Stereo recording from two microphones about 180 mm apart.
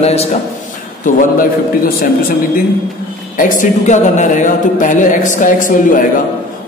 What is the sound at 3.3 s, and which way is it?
A man's voice, 45° left (ahead or behind).